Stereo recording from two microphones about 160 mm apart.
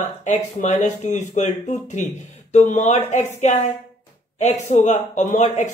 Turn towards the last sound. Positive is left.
turn(degrees=45)  # may be behind; listen again after turning